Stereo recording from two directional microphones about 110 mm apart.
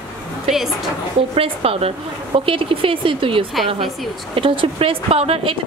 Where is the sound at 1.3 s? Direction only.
60° right (ahead or behind).